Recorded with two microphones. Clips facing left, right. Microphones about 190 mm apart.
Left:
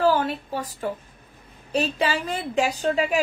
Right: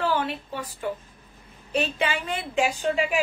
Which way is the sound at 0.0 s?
40° left (ahead or behind).